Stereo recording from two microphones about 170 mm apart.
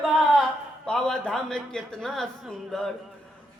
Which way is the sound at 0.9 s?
5° left (ahead or behind).